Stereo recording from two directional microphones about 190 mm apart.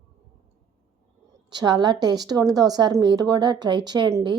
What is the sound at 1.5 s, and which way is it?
A woman's voice, 20° right (ahead or behind).